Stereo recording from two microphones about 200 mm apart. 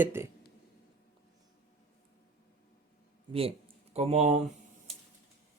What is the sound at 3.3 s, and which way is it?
Speech, 30° right (ahead or behind).